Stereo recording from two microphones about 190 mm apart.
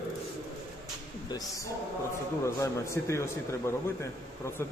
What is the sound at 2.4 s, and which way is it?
Speech, 15° left (ahead or behind).